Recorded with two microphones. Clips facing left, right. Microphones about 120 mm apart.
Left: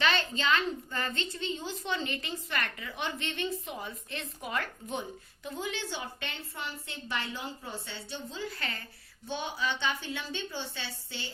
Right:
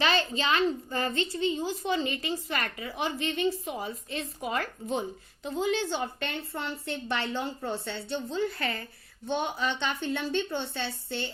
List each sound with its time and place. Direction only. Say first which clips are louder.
0.0 s a woman's voice: right 2 dB; 35° right (ahead or behind); by 11.3 s 55° right (ahead or behind)